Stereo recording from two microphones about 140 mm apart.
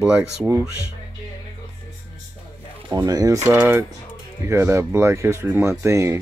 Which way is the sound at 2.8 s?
30° right (ahead or behind).